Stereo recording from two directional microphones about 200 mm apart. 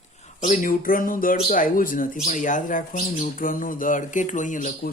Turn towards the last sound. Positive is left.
turn(degrees=40)  # may be behind; listen again after turning